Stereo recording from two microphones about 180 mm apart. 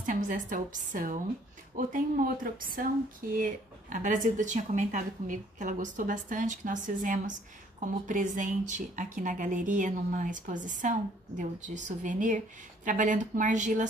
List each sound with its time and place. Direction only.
0.0 s a woman's voice: 45° right (ahead or behind)